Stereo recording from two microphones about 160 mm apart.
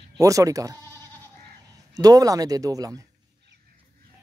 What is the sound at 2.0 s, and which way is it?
Speech, 20° right (ahead or behind).